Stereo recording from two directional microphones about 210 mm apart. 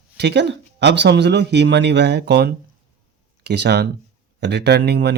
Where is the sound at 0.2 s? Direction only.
55° right (ahead or behind).